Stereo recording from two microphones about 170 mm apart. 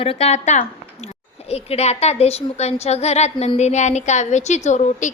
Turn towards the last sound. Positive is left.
turn(degrees=45)  # may be behind; listen again after turning